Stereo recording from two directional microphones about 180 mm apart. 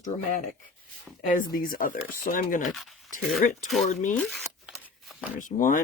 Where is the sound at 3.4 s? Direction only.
45° left (ahead or behind).